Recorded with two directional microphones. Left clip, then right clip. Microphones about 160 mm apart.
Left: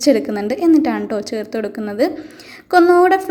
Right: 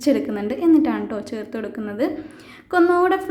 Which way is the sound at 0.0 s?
20° left (ahead or behind).